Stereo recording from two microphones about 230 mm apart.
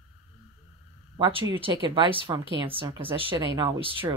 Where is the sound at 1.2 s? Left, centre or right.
Right.